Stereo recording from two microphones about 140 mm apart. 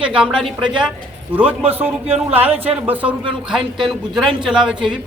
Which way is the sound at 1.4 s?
45° right (ahead or behind).